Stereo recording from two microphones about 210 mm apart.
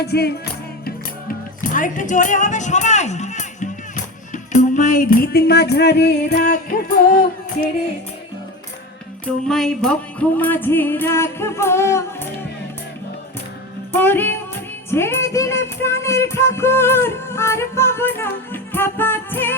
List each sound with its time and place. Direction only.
0.0 s music: 50° left (ahead or behind)
1.7 s speech: 40° left (ahead or behind)
9.2 s music: 5° left (ahead or behind)
13.9 s music: 10° left (ahead or behind)